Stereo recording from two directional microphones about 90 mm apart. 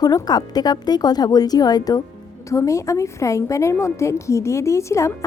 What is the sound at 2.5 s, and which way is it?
A woman's voice, 35° left (ahead or behind).